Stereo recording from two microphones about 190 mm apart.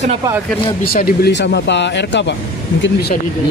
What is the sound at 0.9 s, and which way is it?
Speech, 50° left (ahead or behind).